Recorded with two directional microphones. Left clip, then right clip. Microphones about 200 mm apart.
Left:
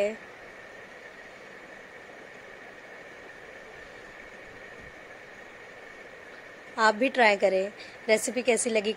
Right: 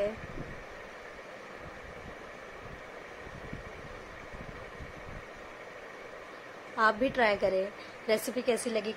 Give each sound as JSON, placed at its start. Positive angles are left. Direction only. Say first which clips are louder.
{"t": 6.8, "sound": "a woman's voice", "louder": "left 4 dB", "side_deg": 15}